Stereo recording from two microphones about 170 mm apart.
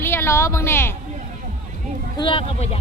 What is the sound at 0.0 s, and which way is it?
Speech, 15° left (ahead or behind).